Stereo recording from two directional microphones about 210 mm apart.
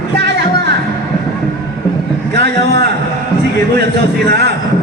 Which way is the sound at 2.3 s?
55° right (ahead or behind).